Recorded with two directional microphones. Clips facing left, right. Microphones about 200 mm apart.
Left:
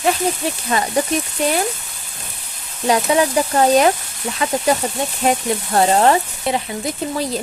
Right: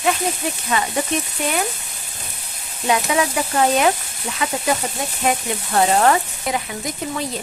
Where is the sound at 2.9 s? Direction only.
35° left (ahead or behind).